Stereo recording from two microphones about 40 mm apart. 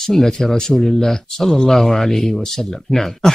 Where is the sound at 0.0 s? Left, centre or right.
Centre.